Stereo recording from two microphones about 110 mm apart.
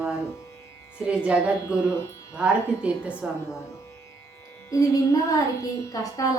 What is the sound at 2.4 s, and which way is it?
A woman's voice, 10° right (ahead or behind).